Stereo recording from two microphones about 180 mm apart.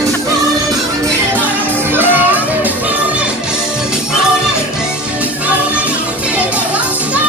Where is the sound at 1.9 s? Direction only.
10° right (ahead or behind).